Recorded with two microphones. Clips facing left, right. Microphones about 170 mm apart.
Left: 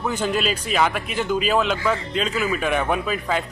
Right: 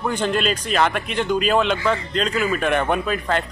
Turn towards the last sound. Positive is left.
turn(degrees=5)  # may be behind; listen again after turning